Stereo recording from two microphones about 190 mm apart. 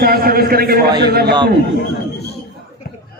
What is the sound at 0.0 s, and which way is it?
A man's voice, 50° right (ahead or behind).